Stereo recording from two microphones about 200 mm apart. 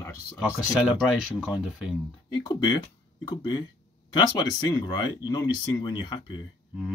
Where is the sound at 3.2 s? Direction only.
20° left (ahead or behind).